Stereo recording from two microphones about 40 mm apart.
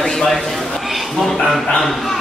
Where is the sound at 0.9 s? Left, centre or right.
Centre.